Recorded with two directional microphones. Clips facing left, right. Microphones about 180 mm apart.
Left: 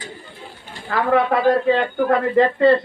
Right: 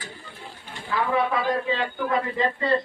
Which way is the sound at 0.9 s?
60° left (ahead or behind).